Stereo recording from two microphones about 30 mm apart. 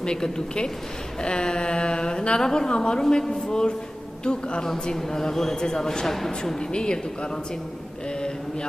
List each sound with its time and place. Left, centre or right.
0.0 s a woman's voice: left
4.9 s speech: centre
6.7 s a woman's voice: left